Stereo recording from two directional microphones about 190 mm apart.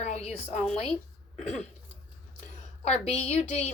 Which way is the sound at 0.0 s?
35° left (ahead or behind).